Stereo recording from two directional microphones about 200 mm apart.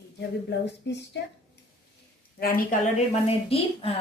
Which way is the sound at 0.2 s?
60° left (ahead or behind).